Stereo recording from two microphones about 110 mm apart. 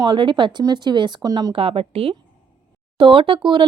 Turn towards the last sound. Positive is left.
turn(degrees=-50)  # may be behind; listen again after turning